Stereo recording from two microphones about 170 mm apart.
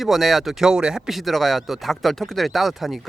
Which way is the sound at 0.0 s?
Centre (ahead or behind).